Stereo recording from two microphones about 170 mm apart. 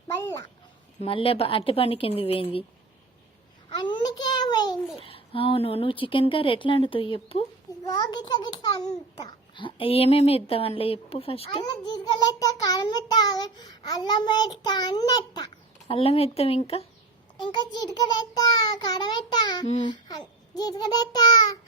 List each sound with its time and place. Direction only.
0.2 s a woman's voice: 20° left (ahead or behind)
1.0 s a woman's voice: 35° left (ahead or behind)
3.8 s a sound: 25° left (ahead or behind)
7.9 s a child's voice: 25° left (ahead or behind)
15.9 s a woman's voice: 35° left (ahead or behind)
17.4 s a woman's voice: 25° left (ahead or behind)